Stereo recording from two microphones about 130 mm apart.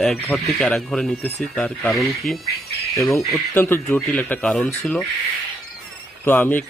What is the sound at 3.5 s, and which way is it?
Speech, 15° left (ahead or behind).